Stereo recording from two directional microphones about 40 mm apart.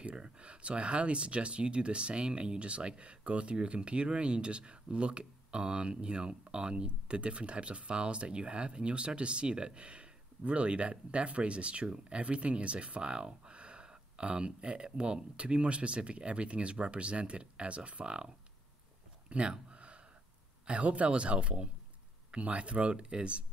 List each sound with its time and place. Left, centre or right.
0.0 s speech: right
19.2 s a sound: right
20.6 s speech: right